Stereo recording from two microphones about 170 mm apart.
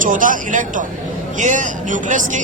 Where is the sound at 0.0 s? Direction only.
50° right (ahead or behind).